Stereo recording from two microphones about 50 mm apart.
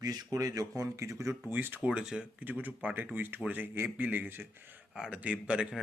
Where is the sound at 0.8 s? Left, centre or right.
Right.